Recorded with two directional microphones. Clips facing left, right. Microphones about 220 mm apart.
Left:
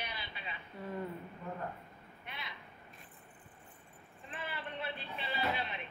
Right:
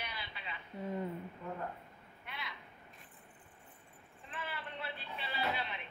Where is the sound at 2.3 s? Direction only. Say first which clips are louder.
Right 1 dB; 20° left (ahead or behind).